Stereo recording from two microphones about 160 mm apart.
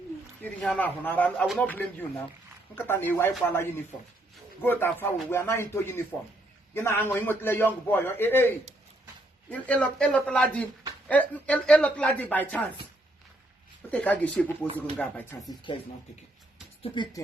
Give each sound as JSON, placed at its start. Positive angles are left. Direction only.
{"t": 0.4, "sound": "speech", "side_deg": 5}
{"t": 13.9, "sound": "speech", "side_deg": 10}
{"t": 16.8, "sound": "speech", "side_deg": 30}